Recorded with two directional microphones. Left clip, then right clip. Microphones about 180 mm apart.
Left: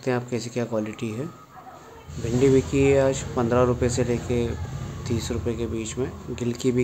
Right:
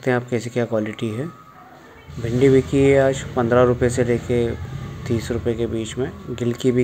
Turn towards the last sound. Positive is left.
turn(degrees=-10)  # may be behind; listen again after turning